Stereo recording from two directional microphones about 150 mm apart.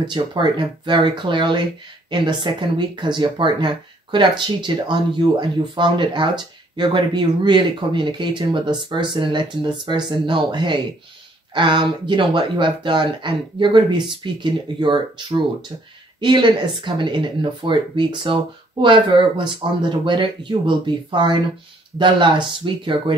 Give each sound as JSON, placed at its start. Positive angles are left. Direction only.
{"t": 0.0, "sound": "speech", "side_deg": -30}